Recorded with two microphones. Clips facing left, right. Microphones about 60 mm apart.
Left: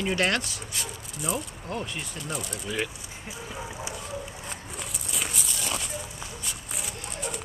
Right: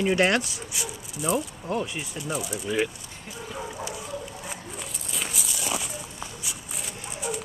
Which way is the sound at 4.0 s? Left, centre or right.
Centre.